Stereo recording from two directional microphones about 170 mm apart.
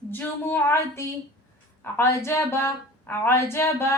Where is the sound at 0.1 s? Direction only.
10° left (ahead or behind).